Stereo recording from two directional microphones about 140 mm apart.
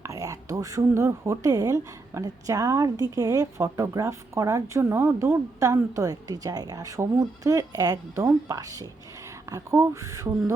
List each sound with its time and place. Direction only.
0.0 s speech: 25° right (ahead or behind)